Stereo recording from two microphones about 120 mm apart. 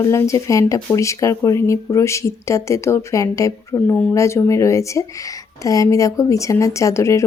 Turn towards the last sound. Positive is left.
turn(degrees=25)  # may be behind; listen again after turning